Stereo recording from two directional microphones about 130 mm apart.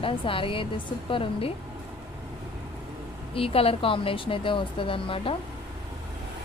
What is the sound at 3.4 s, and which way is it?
Speech, 45° left (ahead or behind).